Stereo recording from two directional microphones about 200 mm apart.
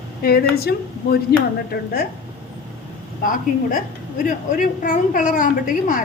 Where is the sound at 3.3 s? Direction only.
45° left (ahead or behind).